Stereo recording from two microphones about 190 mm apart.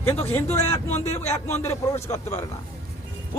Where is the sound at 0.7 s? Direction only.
15° left (ahead or behind).